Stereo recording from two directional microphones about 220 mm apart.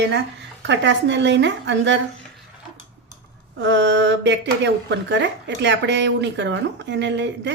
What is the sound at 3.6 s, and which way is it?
Speech, 50° right (ahead or behind).